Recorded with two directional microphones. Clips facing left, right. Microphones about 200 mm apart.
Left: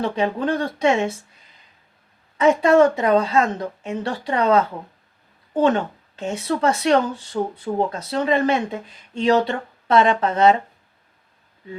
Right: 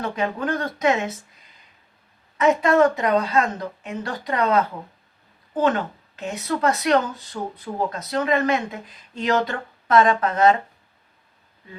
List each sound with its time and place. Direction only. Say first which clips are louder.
0.0 s speech: left 4 dB; 30° left (ahead or behind)
2.4 s speech: left 3 dB; 30° left (ahead or behind)